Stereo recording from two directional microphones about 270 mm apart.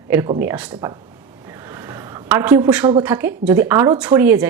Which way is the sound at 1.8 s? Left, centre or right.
Centre.